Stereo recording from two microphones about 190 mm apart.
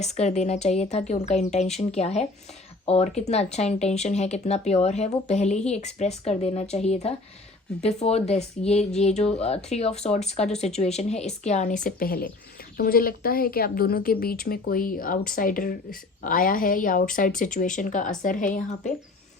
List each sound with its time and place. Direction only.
0.0 s speech: 35° left (ahead or behind)